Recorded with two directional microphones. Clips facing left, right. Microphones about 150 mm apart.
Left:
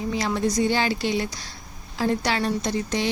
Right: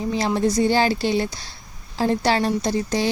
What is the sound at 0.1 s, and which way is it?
Speech, 30° right (ahead or behind).